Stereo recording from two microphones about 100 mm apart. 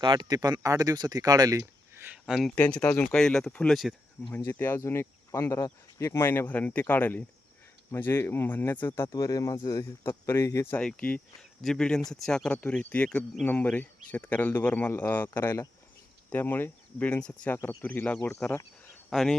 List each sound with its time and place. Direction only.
0.0 s speech: 45° right (ahead or behind)
2.2 s speech: 5° right (ahead or behind)
2.6 s speech: 10° left (ahead or behind)
4.4 s speech: 20° left (ahead or behind)
9.1 s speech: 35° left (ahead or behind)
10.8 s speech: 15° left (ahead or behind)
17.6 s speech: 35° left (ahead or behind)
17.8 s speech: 15° left (ahead or behind)